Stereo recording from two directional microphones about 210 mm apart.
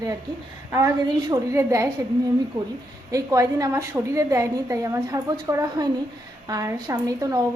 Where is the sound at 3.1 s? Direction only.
15° right (ahead or behind).